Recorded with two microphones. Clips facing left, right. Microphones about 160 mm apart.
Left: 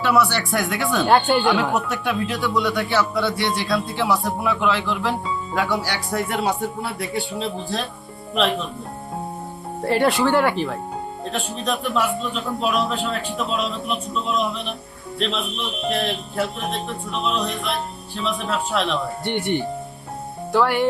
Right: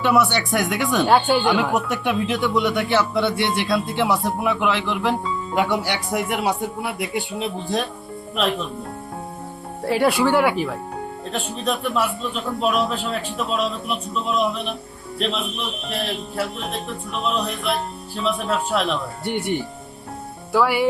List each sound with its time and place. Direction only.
0.0 s a man's voice: 20° right (ahead or behind)
1.0 s a man's voice: centre (ahead or behind)
9.8 s a man's voice: 5° right (ahead or behind)
17.1 s a man's voice: 5° right (ahead or behind)